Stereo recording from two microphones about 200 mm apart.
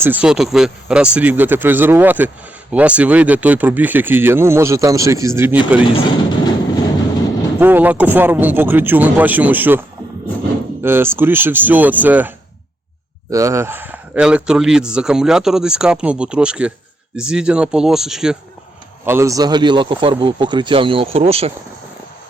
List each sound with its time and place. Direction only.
0.0 s speech: 10° right (ahead or behind)
5.9 s a sound: 20° left (ahead or behind)
7.6 s speech: 10° right (ahead or behind)
10.8 s speech: 10° right (ahead or behind)
13.3 s speech: 15° right (ahead or behind)
19.0 s speech: 15° right (ahead or behind); by 21.5 s 30° right (ahead or behind)